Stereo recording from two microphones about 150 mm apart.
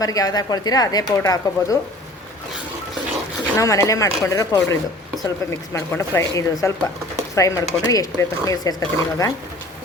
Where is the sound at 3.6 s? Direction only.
20° left (ahead or behind).